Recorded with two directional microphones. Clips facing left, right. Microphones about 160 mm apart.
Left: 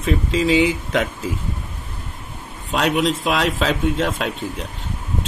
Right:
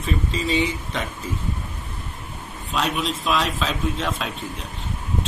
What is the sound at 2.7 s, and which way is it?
Speech, 75° left (ahead or behind).